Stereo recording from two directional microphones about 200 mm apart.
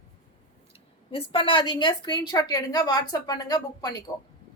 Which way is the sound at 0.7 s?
30° left (ahead or behind).